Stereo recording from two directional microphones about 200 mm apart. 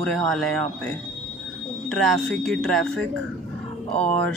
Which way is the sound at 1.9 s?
Centre (ahead or behind).